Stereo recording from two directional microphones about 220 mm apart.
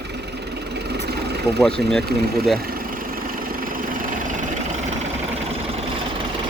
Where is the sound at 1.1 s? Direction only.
45° right (ahead or behind).